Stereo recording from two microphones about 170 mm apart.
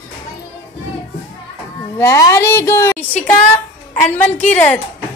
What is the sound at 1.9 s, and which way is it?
A woman's voice, 15° left (ahead or behind).